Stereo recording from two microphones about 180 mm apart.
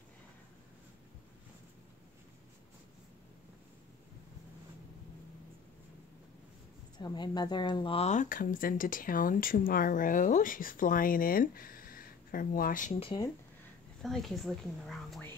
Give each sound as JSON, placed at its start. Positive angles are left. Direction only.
{"t": 7.0, "sound": "speech", "side_deg": 25}
{"t": 13.0, "sound": "speech", "side_deg": 25}
{"t": 14.0, "sound": "speech", "side_deg": 0}